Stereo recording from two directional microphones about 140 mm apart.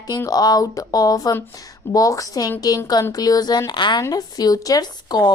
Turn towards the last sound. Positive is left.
turn(degrees=30)  # may be behind; listen again after turning